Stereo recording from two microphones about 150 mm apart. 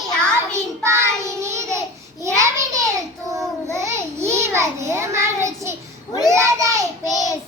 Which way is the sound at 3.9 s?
20° right (ahead or behind).